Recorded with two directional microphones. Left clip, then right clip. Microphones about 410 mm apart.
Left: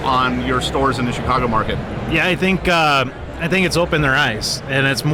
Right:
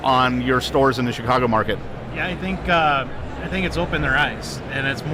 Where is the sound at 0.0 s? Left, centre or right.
Right.